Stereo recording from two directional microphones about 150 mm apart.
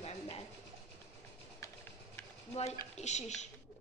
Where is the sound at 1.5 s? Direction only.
20° left (ahead or behind).